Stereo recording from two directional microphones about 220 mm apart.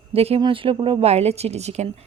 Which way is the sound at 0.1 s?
25° right (ahead or behind).